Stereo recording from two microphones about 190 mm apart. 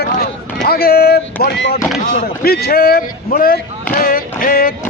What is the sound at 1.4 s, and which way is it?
Speech, 60° left (ahead or behind).